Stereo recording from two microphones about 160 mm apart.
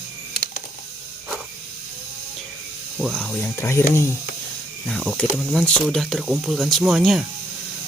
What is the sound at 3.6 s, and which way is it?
Speech, 15° left (ahead or behind).